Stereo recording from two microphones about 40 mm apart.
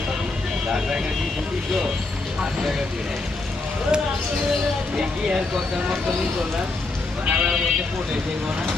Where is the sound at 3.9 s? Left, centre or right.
Right.